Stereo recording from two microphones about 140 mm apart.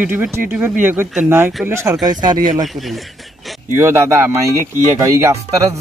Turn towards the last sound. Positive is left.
turn(degrees=-20)  # may be behind; listen again after turning